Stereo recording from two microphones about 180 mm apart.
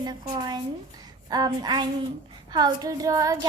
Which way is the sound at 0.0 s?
20° right (ahead or behind).